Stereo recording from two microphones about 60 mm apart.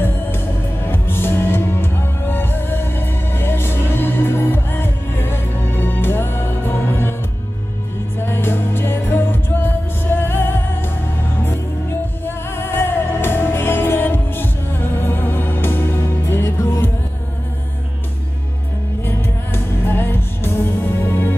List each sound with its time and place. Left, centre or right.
0.0 s music: left
8.2 s music: left
12.3 s music: left
19.0 s music: left